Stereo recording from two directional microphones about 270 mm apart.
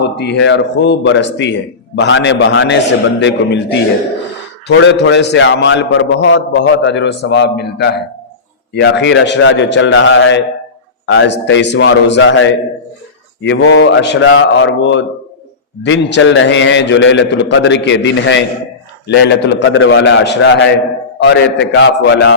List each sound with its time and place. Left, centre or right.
0.0 s speech: left
4.8 s speech: left